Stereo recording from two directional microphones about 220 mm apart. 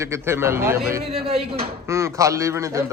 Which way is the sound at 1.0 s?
25° right (ahead or behind).